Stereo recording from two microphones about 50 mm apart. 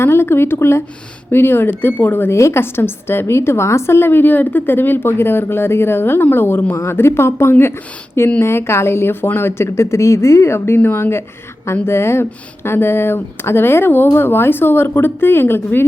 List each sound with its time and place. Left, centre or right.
0.0 s speech: left
2.3 s speech: left